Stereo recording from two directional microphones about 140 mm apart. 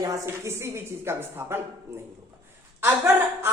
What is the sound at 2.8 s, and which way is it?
Speech, 15° right (ahead or behind).